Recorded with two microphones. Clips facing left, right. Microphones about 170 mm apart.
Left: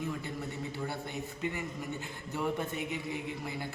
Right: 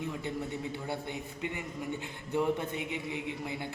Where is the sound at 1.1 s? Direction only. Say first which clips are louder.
Left 1 dB; 15° right (ahead or behind).